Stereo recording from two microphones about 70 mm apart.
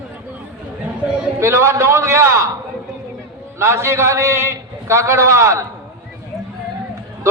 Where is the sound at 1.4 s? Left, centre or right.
Right.